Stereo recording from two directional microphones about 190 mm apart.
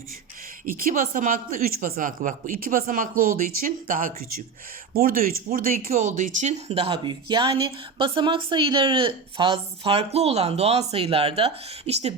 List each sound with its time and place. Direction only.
0.6 s speech: 45° right (ahead or behind); by 12.1 s 30° right (ahead or behind)